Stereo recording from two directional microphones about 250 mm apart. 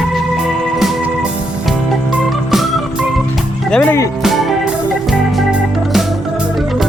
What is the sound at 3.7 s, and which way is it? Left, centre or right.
Music, centre.